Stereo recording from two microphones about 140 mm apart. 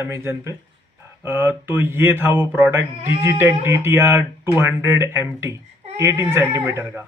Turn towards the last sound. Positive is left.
turn(degrees=-15)  # may be behind; listen again after turning